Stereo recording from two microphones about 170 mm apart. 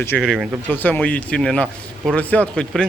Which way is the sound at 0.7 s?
10° left (ahead or behind).